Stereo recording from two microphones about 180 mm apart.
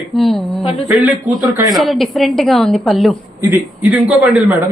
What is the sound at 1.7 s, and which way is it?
A man's voice, centre (ahead or behind).